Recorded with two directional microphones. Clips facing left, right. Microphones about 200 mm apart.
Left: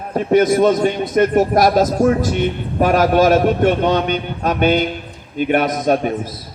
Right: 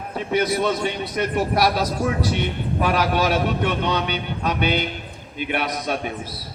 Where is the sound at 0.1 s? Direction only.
45° left (ahead or behind).